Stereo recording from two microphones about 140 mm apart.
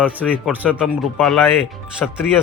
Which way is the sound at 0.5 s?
10° right (ahead or behind).